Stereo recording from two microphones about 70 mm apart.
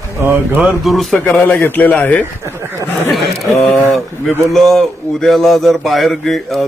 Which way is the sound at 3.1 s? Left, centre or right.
Centre.